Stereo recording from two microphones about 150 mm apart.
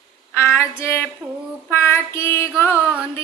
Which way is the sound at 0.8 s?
15° left (ahead or behind).